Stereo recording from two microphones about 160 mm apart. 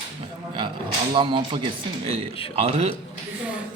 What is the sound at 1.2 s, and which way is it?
Speech, 30° right (ahead or behind).